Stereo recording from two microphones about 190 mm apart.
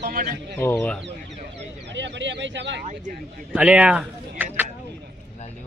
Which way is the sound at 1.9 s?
70° right (ahead or behind).